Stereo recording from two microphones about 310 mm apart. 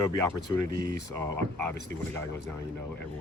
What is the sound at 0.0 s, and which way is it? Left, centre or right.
Speech, right.